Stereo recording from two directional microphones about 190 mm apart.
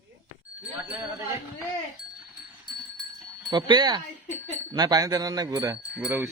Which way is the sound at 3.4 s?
25° right (ahead or behind).